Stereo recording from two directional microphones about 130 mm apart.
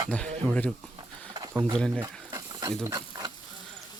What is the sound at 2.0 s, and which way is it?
Stir, 30° right (ahead or behind).